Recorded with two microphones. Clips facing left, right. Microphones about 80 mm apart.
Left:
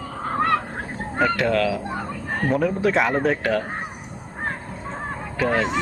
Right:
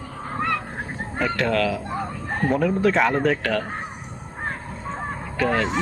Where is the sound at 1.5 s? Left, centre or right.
Centre.